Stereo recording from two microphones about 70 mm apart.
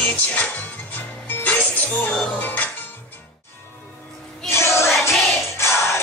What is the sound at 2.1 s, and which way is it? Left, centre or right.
Music, centre.